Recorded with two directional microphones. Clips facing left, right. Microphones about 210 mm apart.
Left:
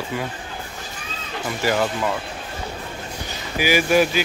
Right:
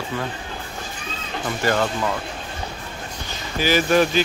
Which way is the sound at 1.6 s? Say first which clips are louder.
Even; 10° left (ahead or behind).